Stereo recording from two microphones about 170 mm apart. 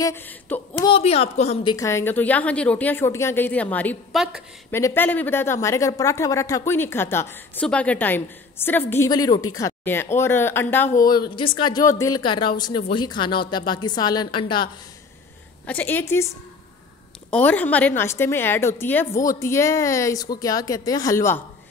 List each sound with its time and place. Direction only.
0.0 s a woman's voice: 10° left (ahead or behind)
0.7 s a woman's voice: 30° left (ahead or behind); by 10.9 s 10° left (ahead or behind)
11.1 s speech: 25° left (ahead or behind)
15.6 s a woman's voice: 10° left (ahead or behind)
17.3 s a woman's voice: 10° left (ahead or behind)